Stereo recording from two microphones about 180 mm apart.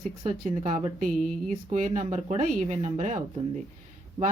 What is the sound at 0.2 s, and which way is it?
Speech, 35° right (ahead or behind).